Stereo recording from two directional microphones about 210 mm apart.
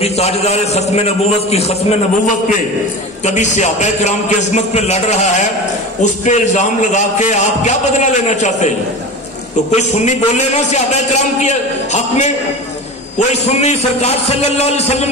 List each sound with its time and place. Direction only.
0.0 s a man's voice: 30° left (ahead or behind)